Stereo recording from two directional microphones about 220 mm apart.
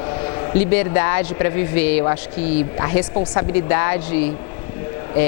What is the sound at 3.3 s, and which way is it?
Speech, 15° left (ahead or behind).